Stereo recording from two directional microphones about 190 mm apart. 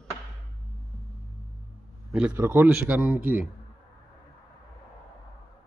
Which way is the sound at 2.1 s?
10° right (ahead or behind).